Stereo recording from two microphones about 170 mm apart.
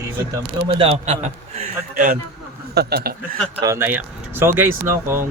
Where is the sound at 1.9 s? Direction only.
60° right (ahead or behind).